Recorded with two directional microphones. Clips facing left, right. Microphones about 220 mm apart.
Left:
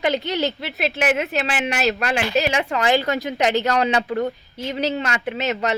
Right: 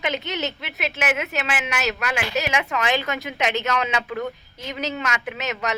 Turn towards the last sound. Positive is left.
turn(degrees=30)  # may be behind; listen again after turning